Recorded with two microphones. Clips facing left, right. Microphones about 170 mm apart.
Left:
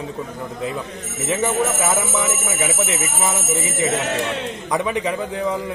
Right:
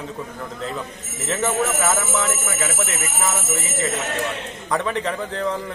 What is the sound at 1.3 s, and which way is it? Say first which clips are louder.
Speech: left 2 dB; 15° left (ahead or behind).